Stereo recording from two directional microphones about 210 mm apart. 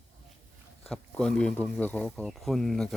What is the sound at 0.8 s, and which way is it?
Speech, 5° left (ahead or behind).